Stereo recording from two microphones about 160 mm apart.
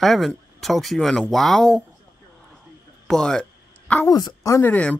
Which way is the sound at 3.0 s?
5° left (ahead or behind).